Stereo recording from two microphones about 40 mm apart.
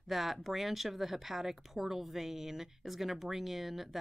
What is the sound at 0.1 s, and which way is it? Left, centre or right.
Speech, centre.